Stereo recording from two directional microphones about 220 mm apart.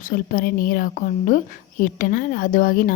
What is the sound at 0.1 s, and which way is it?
A woman's voice, 40° left (ahead or behind).